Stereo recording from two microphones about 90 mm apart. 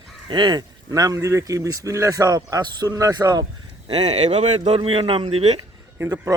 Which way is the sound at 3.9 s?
90° right.